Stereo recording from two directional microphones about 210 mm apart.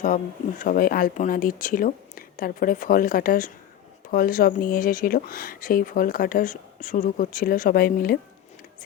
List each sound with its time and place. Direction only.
0.6 s speech: 40° left (ahead or behind)